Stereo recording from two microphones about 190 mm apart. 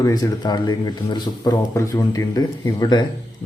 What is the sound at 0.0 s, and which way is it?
Speech, 20° left (ahead or behind).